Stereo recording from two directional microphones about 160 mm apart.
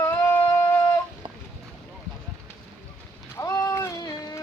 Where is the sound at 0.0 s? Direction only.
20° left (ahead or behind).